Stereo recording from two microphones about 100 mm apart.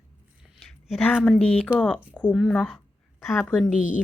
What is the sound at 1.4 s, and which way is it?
A woman's voice, 15° left (ahead or behind).